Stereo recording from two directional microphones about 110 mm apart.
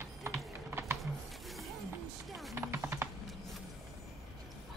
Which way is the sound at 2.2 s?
Centre (ahead or behind).